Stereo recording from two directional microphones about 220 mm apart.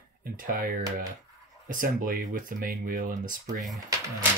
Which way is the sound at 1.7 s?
40° right (ahead or behind).